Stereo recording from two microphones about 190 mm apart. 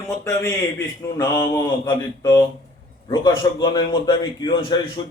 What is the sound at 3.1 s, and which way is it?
A man's voice, 25° left (ahead or behind).